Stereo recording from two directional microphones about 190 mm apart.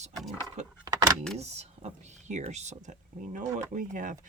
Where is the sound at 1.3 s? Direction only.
35° right (ahead or behind).